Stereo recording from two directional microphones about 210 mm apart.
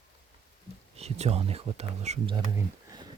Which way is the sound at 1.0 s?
30° right (ahead or behind).